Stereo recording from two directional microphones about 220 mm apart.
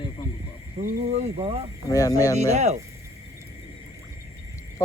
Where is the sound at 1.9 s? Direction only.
15° left (ahead or behind).